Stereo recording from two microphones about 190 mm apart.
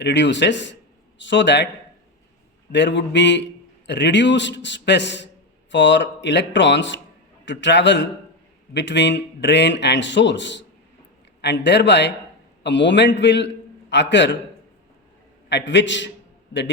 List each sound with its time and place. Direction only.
0.0 s a man's voice: 70° left (ahead or behind)
2.7 s a man's voice: 65° left (ahead or behind)
15.4 s a man's voice: 70° left (ahead or behind)